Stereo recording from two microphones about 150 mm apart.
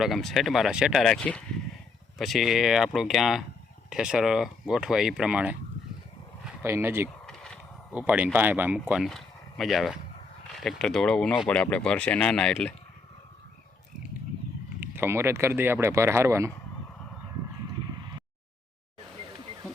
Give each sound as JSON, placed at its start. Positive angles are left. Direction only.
{"t": 0.0, "sound": "speech", "side_deg": 0}
{"t": 6.6, "sound": "speech", "side_deg": -15}
{"t": 7.3, "sound": "a sound", "side_deg": 5}
{"t": 7.9, "sound": "speech", "side_deg": -10}
{"t": 8.9, "sound": "speech", "side_deg": 0}
{"t": 14.8, "sound": "speech", "side_deg": -15}